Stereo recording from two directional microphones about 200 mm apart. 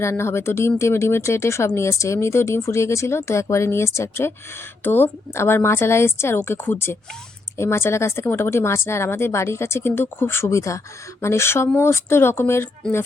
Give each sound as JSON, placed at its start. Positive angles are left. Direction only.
{"t": 0.0, "sound": "speech", "side_deg": 15}